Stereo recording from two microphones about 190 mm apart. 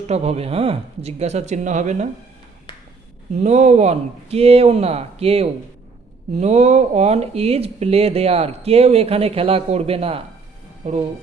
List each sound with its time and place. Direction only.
0.1 s speech: 35° right (ahead or behind)
3.4 s speech: 35° right (ahead or behind)